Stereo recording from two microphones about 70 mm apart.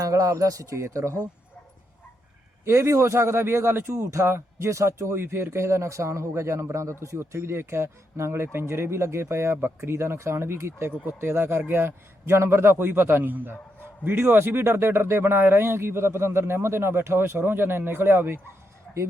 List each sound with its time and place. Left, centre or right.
0.0 s speech: right
2.6 s a man's voice: right